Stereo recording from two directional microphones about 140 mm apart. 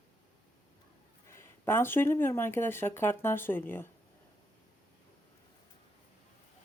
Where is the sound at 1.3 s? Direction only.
20° left (ahead or behind).